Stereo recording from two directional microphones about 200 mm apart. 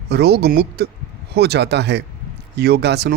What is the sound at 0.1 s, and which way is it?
A man's voice, 55° right (ahead or behind).